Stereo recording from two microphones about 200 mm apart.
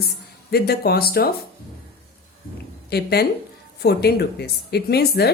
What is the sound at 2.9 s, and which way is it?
Speech, 55° left (ahead or behind).